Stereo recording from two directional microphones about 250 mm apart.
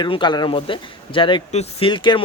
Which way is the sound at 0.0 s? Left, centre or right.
Centre.